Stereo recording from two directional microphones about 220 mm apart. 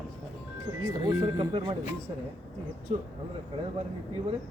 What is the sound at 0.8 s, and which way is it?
Speech, 20° right (ahead or behind).